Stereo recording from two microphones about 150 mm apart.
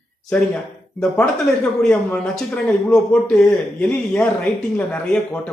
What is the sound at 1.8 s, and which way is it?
Speech, 10° left (ahead or behind).